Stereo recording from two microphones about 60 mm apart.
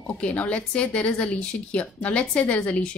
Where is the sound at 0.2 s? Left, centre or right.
Left.